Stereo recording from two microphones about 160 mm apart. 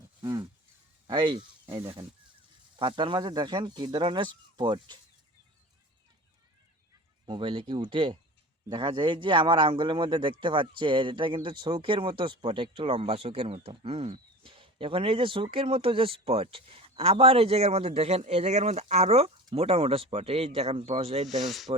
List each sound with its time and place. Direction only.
0.2 s a sound: 25° right (ahead or behind)
1.0 s speech: 30° right (ahead or behind)
7.3 s a man's voice: 30° right (ahead or behind)
21.2 s speech: centre (ahead or behind)